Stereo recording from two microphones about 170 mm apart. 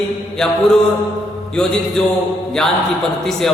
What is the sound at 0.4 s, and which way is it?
Speech, 5° left (ahead or behind).